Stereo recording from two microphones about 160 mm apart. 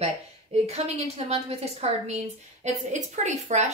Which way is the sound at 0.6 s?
40° right (ahead or behind).